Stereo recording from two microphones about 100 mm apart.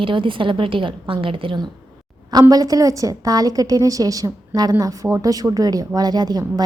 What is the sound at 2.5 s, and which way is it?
A woman's voice, 40° right (ahead or behind).